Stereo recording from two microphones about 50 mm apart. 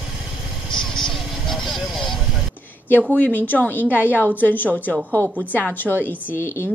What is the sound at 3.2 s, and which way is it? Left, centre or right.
A woman's voice, left.